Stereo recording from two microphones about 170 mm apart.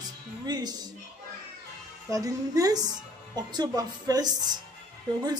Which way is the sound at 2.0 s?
20° right (ahead or behind).